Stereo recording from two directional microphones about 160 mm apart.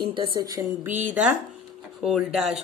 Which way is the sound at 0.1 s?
25° right (ahead or behind).